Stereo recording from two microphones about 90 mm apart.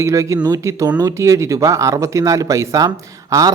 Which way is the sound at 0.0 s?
35° right (ahead or behind).